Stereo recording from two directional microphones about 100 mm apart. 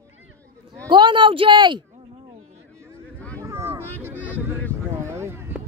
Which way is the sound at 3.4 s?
30° right (ahead or behind).